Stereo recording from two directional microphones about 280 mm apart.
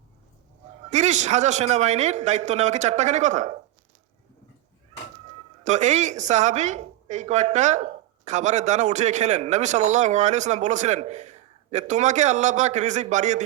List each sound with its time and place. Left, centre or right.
0.9 s a woman's voice: right
5.6 s a woman's voice: right